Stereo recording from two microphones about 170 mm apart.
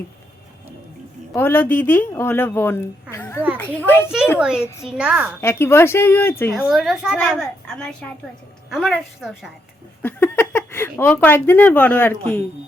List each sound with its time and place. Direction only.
1.3 s speech: 15° left (ahead or behind)
4.4 s a woman's voice: 5° right (ahead or behind)
5.4 s speech: 15° left (ahead or behind)
6.5 s a woman's voice: centre (ahead or behind)
10.0 s speech: 15° left (ahead or behind)